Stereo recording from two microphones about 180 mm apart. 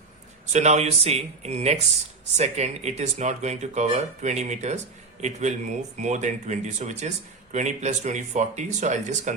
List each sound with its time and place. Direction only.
0.5 s speech: 40° right (ahead or behind)